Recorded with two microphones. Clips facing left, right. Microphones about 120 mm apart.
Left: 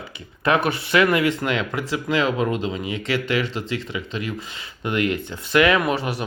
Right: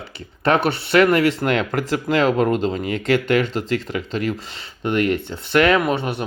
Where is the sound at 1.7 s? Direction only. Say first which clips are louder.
Right 3 dB; 40° right (ahead or behind).